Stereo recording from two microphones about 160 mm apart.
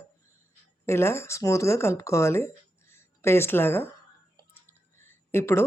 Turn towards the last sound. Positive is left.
turn(degrees=15)  # may be behind; listen again after turning